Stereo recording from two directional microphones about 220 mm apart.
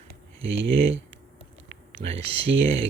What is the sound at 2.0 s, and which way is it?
Speech, 25° right (ahead or behind).